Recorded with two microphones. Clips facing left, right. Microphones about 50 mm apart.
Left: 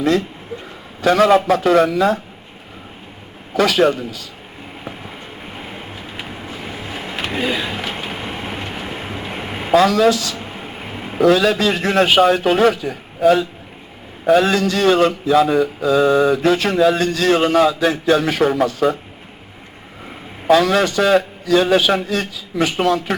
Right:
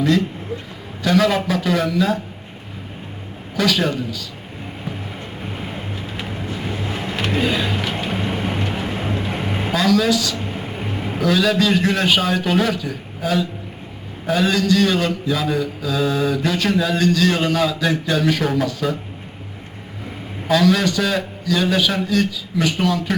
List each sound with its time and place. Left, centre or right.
1.0 s mantra: left
3.5 s mantra: left
6.1 s vehicle: centre
9.7 s mantra: left
10.8 s a sound: centre
11.2 s mantra: left
20.5 s mantra: left